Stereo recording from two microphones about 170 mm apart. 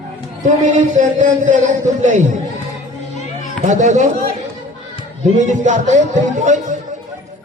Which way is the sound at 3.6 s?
45° right (ahead or behind).